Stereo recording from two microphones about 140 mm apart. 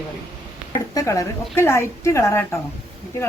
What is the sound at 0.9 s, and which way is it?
A woman's voice, 25° left (ahead or behind).